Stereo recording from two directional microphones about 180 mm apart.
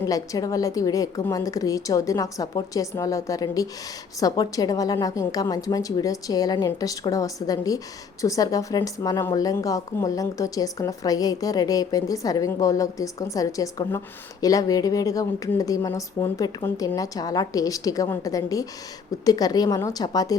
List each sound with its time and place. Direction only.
0.0 s a woman's voice: 20° left (ahead or behind)